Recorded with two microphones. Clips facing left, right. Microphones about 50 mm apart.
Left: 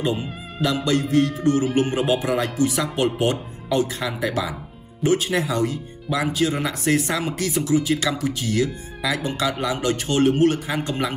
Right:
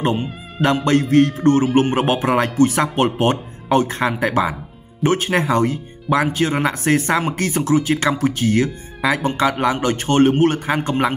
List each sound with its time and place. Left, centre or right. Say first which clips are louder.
1.1 s speech: right 5 dB; right